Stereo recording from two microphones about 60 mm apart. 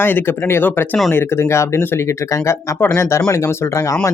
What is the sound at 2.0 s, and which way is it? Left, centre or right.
Speech, left.